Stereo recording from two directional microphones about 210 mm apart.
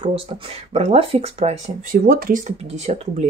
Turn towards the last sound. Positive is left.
turn(degrees=-30)  # may be behind; listen again after turning